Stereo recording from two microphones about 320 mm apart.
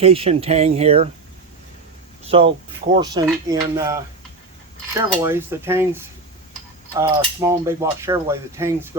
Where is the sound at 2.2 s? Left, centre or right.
Centre.